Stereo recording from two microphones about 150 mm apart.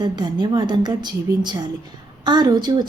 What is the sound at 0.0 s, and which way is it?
A woman's voice, 30° right (ahead or behind).